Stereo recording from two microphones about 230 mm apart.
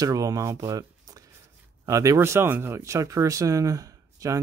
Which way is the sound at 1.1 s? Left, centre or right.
Centre.